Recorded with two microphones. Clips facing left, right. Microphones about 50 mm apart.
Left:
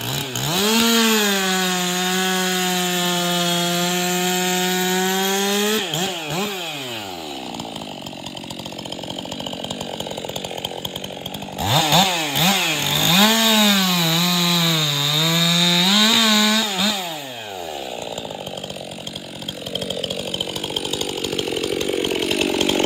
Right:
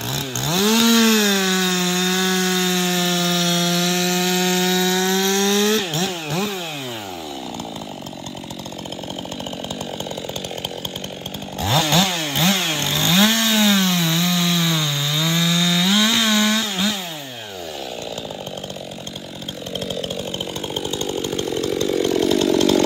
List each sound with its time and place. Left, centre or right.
0.1 s chainsaw: centre
11.6 s chainsaw: centre
21.3 s chainsaw: left
21.8 s chainsaw: left